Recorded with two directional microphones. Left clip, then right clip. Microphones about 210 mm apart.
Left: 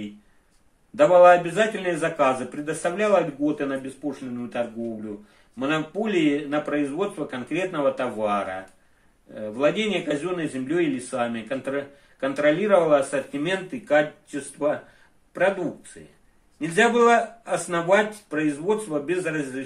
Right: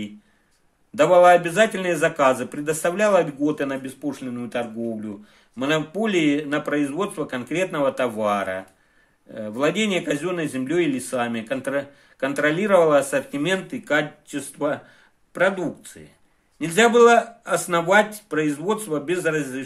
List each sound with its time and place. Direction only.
0.9 s speech: 45° right (ahead or behind)
16.5 s speech: 45° right (ahead or behind)